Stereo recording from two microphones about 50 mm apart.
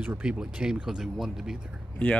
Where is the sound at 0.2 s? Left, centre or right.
Centre.